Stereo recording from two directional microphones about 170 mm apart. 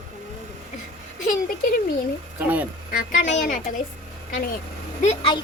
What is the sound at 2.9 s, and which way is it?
Speech, 50° left (ahead or behind).